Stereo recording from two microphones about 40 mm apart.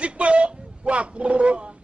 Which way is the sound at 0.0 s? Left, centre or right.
Right.